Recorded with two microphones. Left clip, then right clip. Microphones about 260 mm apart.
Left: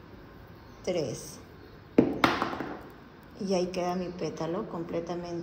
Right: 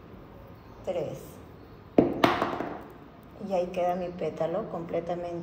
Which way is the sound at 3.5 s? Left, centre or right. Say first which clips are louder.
Right 2 dB; left.